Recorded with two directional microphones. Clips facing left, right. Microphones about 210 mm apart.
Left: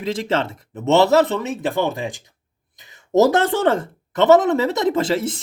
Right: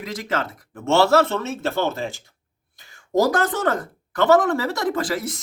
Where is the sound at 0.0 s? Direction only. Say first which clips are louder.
Left 5 dB; 30° left (ahead or behind).